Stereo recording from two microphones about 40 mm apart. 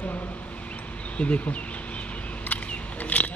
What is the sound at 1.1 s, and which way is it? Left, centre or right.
Speech, left.